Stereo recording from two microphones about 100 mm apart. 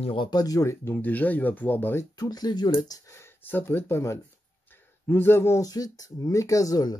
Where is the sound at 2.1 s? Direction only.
40° left (ahead or behind).